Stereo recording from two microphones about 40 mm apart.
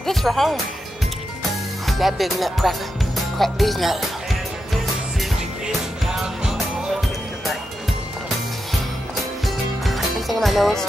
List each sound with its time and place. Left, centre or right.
0.0 s speech: centre
1.9 s speech: centre
6.0 s music: centre
9.8 s music: centre